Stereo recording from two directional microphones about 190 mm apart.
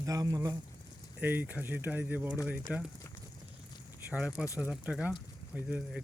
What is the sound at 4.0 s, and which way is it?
Speech, 5° right (ahead or behind).